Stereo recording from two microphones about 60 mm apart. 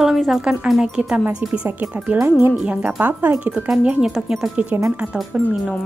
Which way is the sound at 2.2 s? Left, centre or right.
Right.